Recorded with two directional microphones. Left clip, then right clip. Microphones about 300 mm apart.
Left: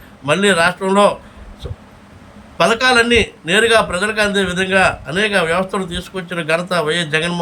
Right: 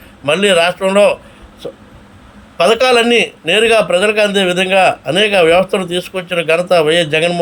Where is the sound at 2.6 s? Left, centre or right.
Centre.